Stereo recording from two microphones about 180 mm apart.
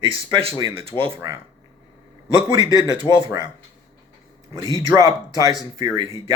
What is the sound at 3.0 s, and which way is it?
Speech, 25° right (ahead or behind).